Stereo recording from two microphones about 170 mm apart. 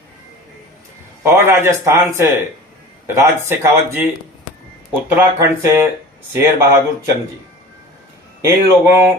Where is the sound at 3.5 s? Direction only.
15° right (ahead or behind).